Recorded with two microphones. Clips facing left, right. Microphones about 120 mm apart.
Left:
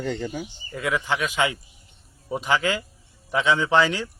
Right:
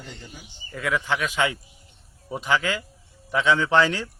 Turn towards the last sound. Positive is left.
turn(degrees=10)  # may be behind; listen again after turning